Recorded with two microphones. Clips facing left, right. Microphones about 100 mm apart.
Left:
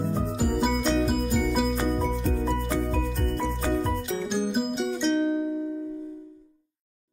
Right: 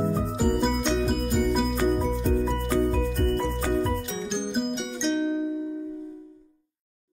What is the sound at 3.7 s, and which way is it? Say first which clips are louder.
Music: even; centre (ahead or behind).